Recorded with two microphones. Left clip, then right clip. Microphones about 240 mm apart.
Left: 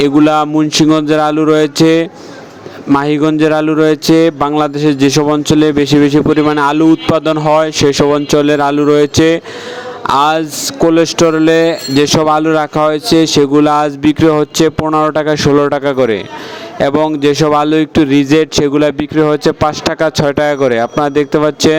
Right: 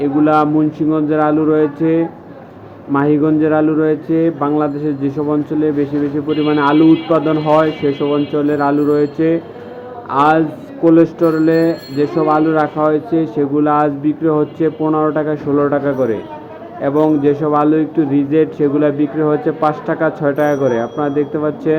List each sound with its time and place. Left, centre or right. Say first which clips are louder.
0.0 s speech: left 3 dB; left
10.1 s speech: left 2 dB; left